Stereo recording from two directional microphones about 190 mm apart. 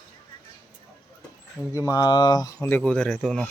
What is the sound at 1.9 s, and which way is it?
Speech, 20° left (ahead or behind).